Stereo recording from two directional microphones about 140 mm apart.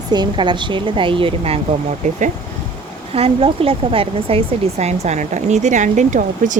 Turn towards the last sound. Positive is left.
turn(degrees=-60)  # may be behind; listen again after turning